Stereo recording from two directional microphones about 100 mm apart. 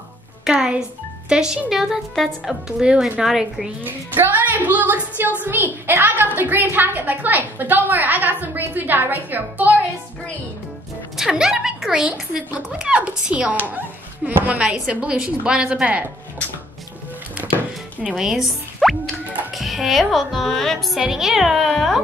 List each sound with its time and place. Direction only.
0.5 s speech: 10° right (ahead or behind)
3.8 s a woman's voice: 20° right (ahead or behind)
11.1 s speech: 5° right (ahead or behind)
18.0 s speech: 5° right (ahead or behind)